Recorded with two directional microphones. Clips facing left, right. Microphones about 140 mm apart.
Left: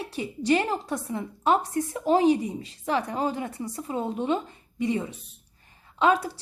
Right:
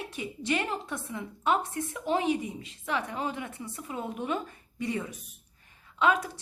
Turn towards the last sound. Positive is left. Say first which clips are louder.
# left 4 dB
turn(degrees=35)  # may be behind; listen again after turning